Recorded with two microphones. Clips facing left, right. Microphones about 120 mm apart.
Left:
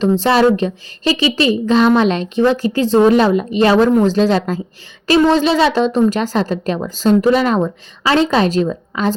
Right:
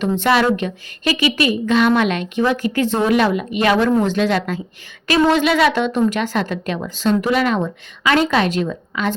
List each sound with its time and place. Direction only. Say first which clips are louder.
0.0 s a woman's voice: left 4 dB; 30° left (ahead or behind)